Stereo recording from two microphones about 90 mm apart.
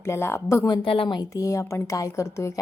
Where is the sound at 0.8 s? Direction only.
85° left.